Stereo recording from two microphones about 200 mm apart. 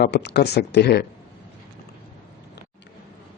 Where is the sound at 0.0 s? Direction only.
55° left (ahead or behind).